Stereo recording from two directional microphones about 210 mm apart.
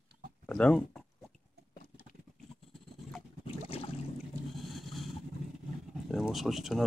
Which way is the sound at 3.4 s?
25° left (ahead or behind).